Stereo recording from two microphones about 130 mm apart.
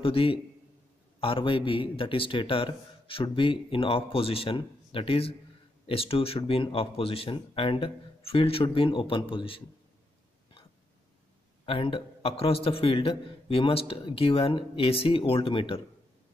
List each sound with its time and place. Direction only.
0.0 s a man's voice: 45° left (ahead or behind)
11.6 s a man's voice: 45° left (ahead or behind)